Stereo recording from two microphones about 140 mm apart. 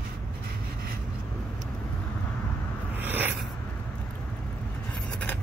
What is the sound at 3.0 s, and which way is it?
Writing, 15° right (ahead or behind).